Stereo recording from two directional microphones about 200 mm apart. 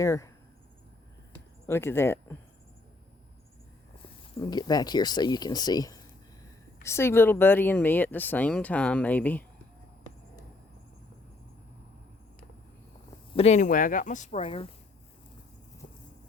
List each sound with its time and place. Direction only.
0.0 s speech: 15° left (ahead or behind)
1.6 s speech: 10° left (ahead or behind)
4.4 s speech: 20° left (ahead or behind)
13.3 s speech: 35° left (ahead or behind)
14.4 s speech: 25° left (ahead or behind)
15.8 s vehicle: 40° left (ahead or behind)